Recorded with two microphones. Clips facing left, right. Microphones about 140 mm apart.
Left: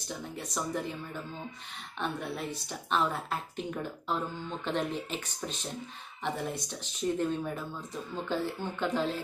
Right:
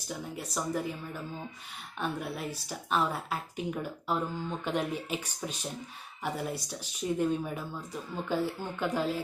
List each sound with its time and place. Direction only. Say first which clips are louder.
0.1 s speech: right 1 dB; 5° right (ahead or behind)
2.0 s a woman's voice: even; 5° right (ahead or behind)